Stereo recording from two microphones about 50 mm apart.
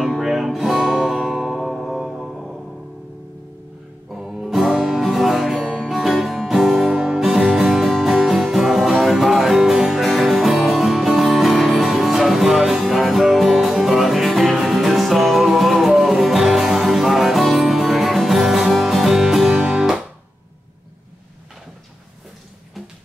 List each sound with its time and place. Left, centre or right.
0.0 s music: centre
4.2 s music: centre